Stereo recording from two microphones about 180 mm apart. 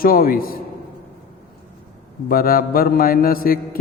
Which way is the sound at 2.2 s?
55° left (ahead or behind).